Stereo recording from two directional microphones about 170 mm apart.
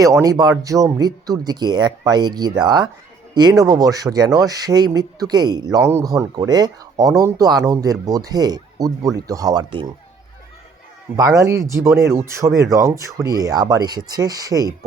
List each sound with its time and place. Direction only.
0.0 s speech: 20° right (ahead or behind)
11.2 s speech: 20° right (ahead or behind)